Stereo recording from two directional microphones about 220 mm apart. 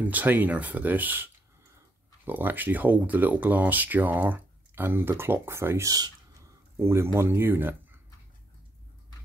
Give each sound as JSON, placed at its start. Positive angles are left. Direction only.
{"t": 0.0, "sound": "speech", "side_deg": -10}